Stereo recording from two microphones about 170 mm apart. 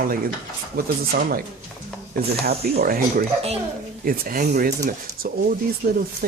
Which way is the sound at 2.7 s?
60° right (ahead or behind).